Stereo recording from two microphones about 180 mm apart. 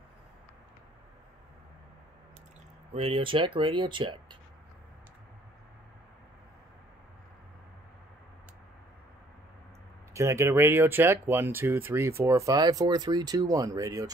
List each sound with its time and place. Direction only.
2.9 s speech: 30° right (ahead or behind)
10.1 s speech: 15° right (ahead or behind)